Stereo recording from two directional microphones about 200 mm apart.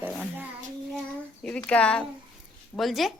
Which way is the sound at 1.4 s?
5° left (ahead or behind).